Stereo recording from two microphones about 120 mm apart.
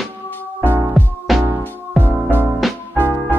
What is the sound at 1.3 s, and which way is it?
Music, centre (ahead or behind).